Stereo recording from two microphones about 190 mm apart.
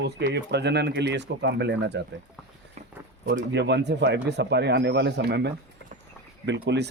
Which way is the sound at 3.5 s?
65° right (ahead or behind).